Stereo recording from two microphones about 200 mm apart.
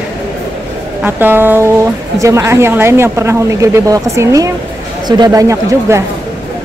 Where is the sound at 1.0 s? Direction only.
10° right (ahead or behind).